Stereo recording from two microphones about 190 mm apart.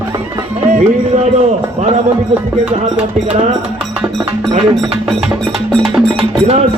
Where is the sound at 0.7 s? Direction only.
40° right (ahead or behind).